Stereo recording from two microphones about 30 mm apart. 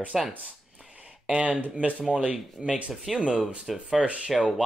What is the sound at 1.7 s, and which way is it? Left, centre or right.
Speech, right.